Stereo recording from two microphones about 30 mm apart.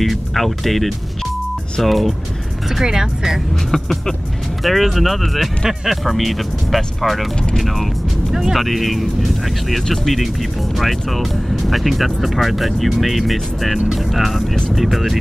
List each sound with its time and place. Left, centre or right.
0.0 s speech: centre
2.8 s speech: centre
4.6 s speech: centre
8.3 s speech: centre
8.5 s speech: centre